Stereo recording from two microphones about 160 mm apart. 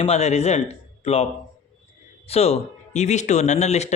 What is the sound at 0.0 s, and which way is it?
A man's voice, 45° left (ahead or behind).